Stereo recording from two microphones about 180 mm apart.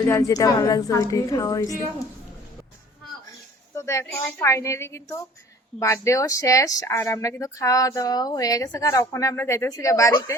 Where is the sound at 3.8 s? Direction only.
15° left (ahead or behind).